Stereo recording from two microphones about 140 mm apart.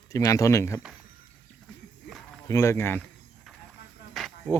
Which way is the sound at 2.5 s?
20° left (ahead or behind).